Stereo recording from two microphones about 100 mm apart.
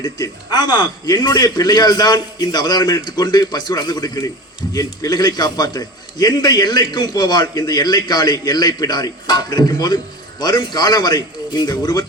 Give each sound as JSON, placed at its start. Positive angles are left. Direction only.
{"t": 0.0, "sound": "a man's voice", "side_deg": 45}